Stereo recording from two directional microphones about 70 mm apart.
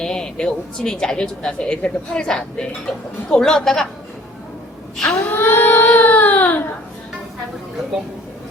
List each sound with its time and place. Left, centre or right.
0.0 s speech: centre
4.9 s speech: centre
5.2 s a sound: left